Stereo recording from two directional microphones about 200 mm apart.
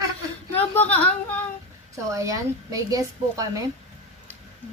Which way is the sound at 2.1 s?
15° right (ahead or behind).